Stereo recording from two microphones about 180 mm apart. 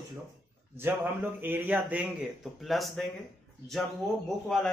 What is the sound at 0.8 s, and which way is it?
A man's voice, 10° right (ahead or behind).